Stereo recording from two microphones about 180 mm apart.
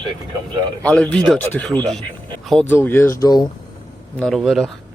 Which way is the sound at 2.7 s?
10° left (ahead or behind).